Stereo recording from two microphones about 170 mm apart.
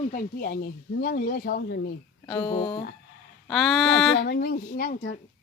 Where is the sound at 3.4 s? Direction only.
Centre (ahead or behind).